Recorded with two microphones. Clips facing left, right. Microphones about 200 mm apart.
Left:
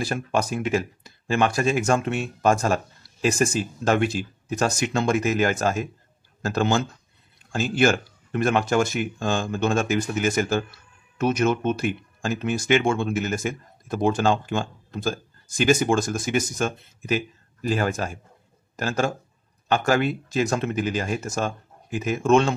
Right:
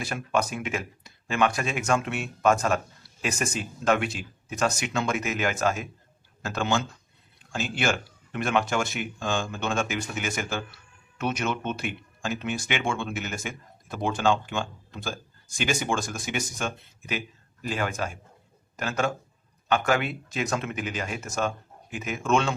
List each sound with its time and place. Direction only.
0.0 s speech: 35° left (ahead or behind)